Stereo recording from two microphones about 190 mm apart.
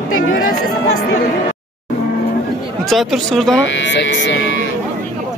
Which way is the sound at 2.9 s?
Centre (ahead or behind).